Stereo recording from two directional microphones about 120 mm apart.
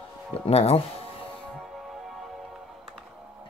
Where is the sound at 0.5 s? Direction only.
60° left (ahead or behind).